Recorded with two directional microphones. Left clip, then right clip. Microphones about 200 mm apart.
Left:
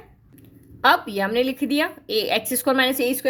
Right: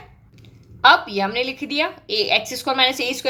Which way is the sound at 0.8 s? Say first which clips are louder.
Right 4 dB; 40° left (ahead or behind).